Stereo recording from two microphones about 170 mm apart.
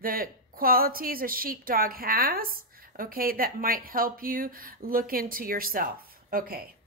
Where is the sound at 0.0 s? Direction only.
55° right (ahead or behind).